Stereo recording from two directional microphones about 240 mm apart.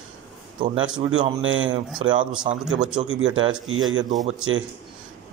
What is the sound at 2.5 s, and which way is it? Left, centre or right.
Speech, centre.